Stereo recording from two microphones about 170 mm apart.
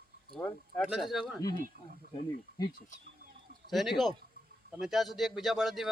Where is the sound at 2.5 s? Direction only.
65° right (ahead or behind).